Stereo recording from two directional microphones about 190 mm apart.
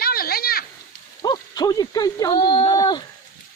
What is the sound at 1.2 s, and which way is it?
A child's voice, 20° left (ahead or behind).